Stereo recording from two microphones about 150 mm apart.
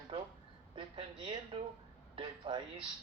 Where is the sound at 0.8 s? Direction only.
30° right (ahead or behind).